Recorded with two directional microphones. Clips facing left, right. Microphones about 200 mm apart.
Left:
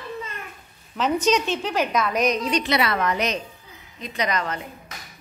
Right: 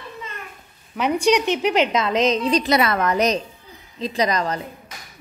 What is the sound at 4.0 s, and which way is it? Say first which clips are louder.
Speech: right 5 dB; 30° right (ahead or behind).